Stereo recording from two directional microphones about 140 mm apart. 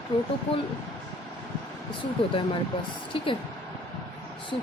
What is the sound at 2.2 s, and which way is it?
Speech, 40° left (ahead or behind).